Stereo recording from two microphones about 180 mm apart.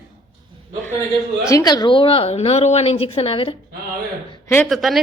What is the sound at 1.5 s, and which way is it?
A woman's voice, 20° left (ahead or behind).